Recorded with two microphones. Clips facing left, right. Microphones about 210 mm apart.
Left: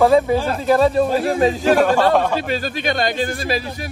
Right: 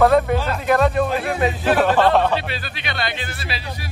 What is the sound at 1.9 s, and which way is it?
Speech, 10° left (ahead or behind).